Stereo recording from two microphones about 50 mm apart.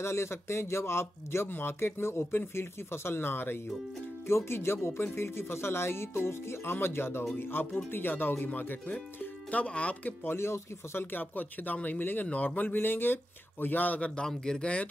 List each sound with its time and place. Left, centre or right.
0.0 s speech: left
4.5 s speech: left
9.2 s music: left
9.7 s speech: left
10.3 s speech: left
14.2 s speech: centre